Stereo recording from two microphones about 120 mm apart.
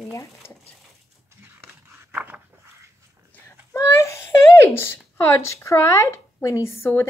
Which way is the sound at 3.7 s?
25° left (ahead or behind).